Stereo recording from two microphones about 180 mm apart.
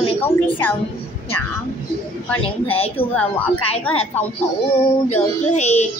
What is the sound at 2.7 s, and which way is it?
Speech, 35° left (ahead or behind).